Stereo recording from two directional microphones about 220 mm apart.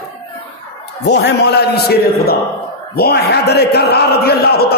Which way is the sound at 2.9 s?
45° left (ahead or behind).